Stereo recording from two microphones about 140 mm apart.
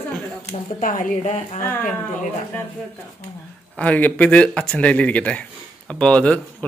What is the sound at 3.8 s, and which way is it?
Speech, 10° left (ahead or behind).